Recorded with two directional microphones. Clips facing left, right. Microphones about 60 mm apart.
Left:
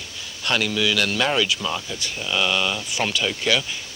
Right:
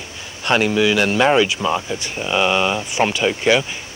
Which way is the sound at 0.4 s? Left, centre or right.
Right.